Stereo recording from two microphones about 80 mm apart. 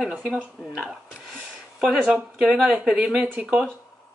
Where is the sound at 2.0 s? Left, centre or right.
Centre.